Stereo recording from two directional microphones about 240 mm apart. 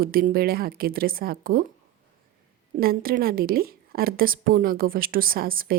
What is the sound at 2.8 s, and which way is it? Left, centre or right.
A woman's voice, right.